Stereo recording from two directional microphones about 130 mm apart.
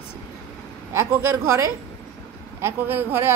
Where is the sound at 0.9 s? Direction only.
20° right (ahead or behind).